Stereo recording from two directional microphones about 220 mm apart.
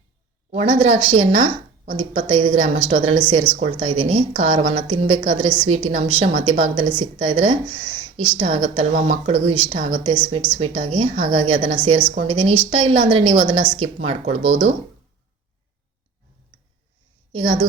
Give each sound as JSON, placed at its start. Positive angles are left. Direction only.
{"t": 0.5, "sound": "a woman's voice", "side_deg": -25}
{"t": 17.3, "sound": "a woman's voice", "side_deg": -25}